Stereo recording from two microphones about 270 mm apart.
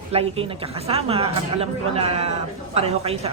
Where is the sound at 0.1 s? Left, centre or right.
Right.